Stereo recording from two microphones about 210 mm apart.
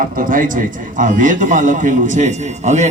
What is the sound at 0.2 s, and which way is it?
A man's voice, 40° right (ahead or behind).